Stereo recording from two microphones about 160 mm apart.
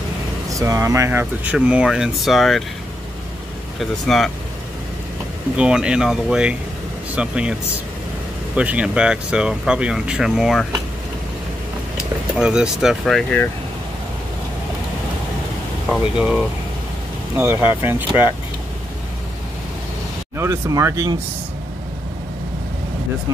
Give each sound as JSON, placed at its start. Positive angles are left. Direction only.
{"t": 0.5, "sound": "speech", "side_deg": -20}
{"t": 4.1, "sound": "speech", "side_deg": 0}
{"t": 5.6, "sound": "speech", "side_deg": -5}
{"t": 8.5, "sound": "speech", "side_deg": -10}
{"t": 12.4, "sound": "speech", "side_deg": -5}
{"t": 15.9, "sound": "speech", "side_deg": -5}
{"t": 20.3, "sound": "speech", "side_deg": -20}